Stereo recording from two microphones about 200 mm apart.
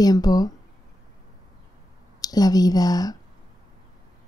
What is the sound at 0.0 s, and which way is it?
Speech, 20° left (ahead or behind).